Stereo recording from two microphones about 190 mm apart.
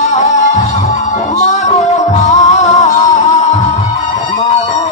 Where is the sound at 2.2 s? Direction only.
35° left (ahead or behind).